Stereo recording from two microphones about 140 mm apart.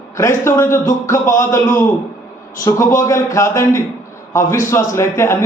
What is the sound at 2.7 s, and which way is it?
A man's voice, 25° left (ahead or behind).